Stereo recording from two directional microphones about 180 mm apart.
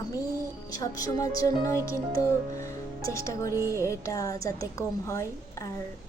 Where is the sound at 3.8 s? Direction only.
15° left (ahead or behind).